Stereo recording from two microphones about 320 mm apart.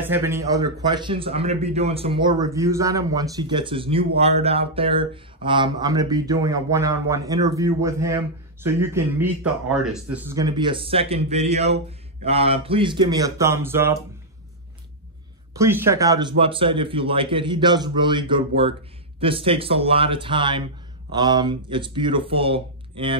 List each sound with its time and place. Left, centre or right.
0.0 s speech: centre
15.5 s speech: centre